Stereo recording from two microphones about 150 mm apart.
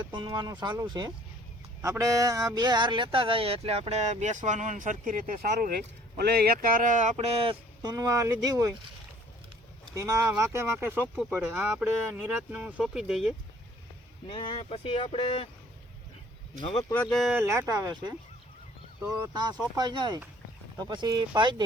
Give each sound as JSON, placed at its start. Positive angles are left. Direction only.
{"t": 0.0, "sound": "speech", "side_deg": -30}
{"t": 9.9, "sound": "speech", "side_deg": -20}
{"t": 14.3, "sound": "speech", "side_deg": 35}
{"t": 16.9, "sound": "speech", "side_deg": 5}
{"t": 17.3, "sound": "speech", "side_deg": -20}
{"t": 19.3, "sound": "speech", "side_deg": -30}